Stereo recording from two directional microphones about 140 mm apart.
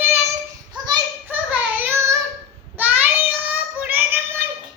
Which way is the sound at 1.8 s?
20° right (ahead or behind).